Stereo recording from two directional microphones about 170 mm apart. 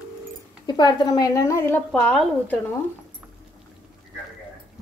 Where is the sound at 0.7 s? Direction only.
25° left (ahead or behind); by 2.5 s 5° left (ahead or behind).